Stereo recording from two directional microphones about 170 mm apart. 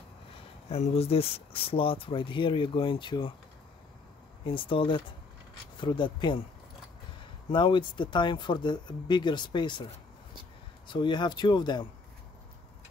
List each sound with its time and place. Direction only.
0.7 s speech: 35° left (ahead or behind)
4.5 s speech: 30° left (ahead or behind)
7.5 s speech: 25° left (ahead or behind)
10.9 s speech: 25° left (ahead or behind)